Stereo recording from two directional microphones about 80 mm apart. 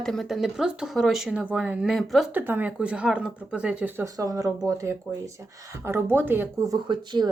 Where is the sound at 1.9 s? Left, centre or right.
Centre.